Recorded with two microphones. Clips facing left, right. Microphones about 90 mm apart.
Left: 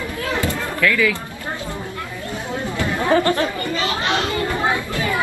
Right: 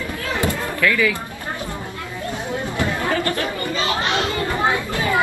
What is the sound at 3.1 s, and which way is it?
Chatter, 25° left (ahead or behind).